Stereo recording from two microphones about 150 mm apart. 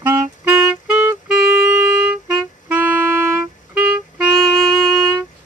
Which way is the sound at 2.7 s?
10° right (ahead or behind).